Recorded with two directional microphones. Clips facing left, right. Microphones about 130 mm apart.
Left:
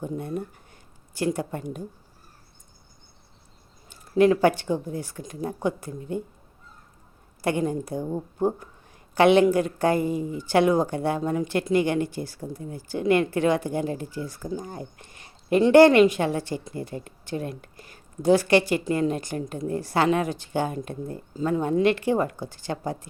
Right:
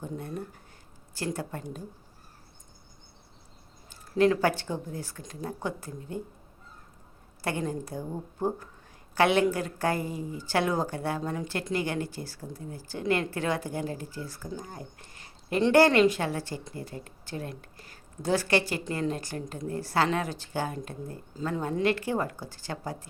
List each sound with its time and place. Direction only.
1.1 s speech: 15° left (ahead or behind)
4.2 s speech: 20° left (ahead or behind)
7.4 s a woman's voice: 20° left (ahead or behind)